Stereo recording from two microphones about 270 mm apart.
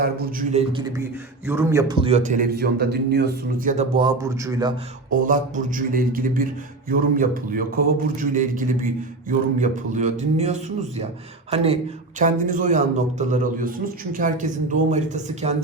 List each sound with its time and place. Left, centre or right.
0.0 s speech: right
1.5 s a man's voice: centre
5.2 s a man's voice: right